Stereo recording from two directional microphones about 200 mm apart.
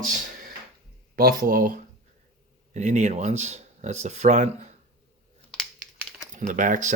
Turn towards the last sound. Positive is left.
turn(degrees=-40)  # may be behind; listen again after turning